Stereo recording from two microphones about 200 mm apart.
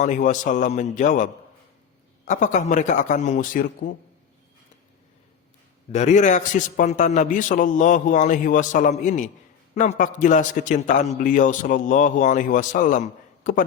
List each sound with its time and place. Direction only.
0.0 s a man's voice: 40° left (ahead or behind)
5.9 s a man's voice: 35° left (ahead or behind)